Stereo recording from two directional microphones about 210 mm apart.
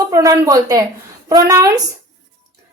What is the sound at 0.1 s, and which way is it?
A woman's voice, 15° right (ahead or behind).